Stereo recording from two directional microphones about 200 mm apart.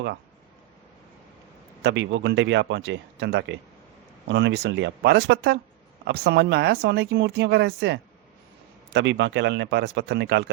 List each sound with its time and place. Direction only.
1.8 s speech: 60° right (ahead or behind)